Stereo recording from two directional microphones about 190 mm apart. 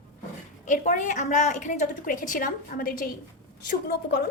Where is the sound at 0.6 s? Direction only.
40° left (ahead or behind).